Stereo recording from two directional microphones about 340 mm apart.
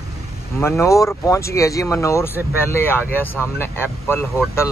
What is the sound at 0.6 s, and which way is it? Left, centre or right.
Speech, centre.